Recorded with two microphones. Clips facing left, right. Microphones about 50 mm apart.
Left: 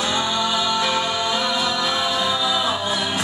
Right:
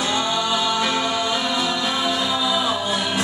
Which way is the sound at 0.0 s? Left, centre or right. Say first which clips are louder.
Even; centre.